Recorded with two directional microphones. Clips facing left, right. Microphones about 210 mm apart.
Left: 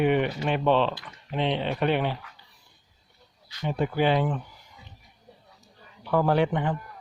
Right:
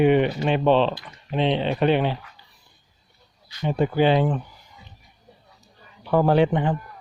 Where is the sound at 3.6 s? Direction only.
25° right (ahead or behind).